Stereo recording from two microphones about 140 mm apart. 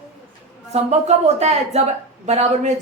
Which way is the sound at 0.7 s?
50° right (ahead or behind).